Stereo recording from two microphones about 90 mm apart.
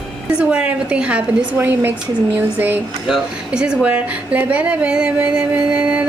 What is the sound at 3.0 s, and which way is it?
Speech, 5° right (ahead or behind).